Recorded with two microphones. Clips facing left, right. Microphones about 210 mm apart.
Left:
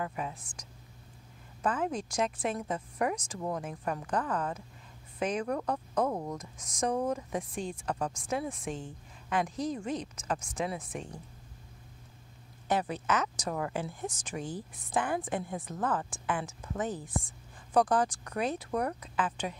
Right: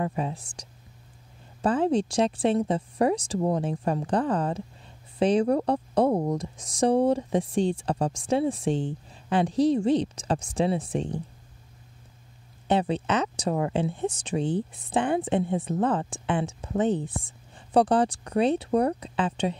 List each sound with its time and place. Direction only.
0.0 s a woman's voice: 30° right (ahead or behind)
1.6 s a woman's voice: 30° right (ahead or behind)
12.6 s a woman's voice: 25° right (ahead or behind)